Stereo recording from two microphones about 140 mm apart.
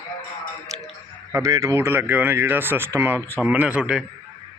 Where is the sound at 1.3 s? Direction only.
20° right (ahead or behind); by 4.1 s 5° right (ahead or behind).